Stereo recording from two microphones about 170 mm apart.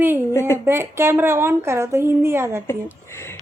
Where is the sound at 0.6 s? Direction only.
15° right (ahead or behind).